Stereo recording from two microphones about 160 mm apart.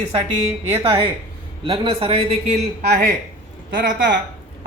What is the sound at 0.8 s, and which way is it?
A man's voice, 35° right (ahead or behind).